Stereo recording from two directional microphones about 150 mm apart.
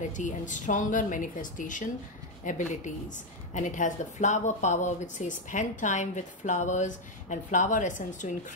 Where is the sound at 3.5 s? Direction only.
60° left (ahead or behind).